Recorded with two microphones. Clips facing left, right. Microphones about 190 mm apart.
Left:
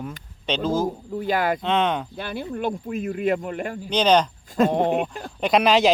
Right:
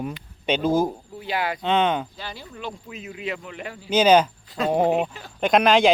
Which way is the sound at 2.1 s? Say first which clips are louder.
Left 8 dB; 55° left (ahead or behind).